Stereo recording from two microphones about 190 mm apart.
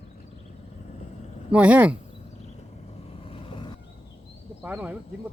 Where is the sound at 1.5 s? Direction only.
5° right (ahead or behind).